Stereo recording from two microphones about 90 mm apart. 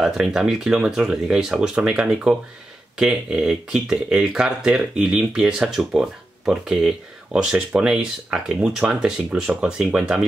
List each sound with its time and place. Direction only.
0.0 s speech: 5° right (ahead or behind)